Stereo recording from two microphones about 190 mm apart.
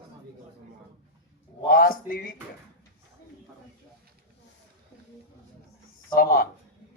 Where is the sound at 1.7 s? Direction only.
50° left (ahead or behind).